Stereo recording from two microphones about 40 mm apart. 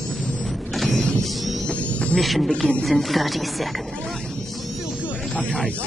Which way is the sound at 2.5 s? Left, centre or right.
Left.